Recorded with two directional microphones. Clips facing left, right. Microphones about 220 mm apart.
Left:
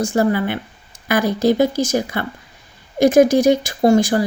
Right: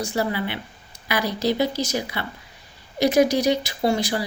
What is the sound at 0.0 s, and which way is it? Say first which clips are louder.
Speech: left 7 dB; 50° left (ahead or behind).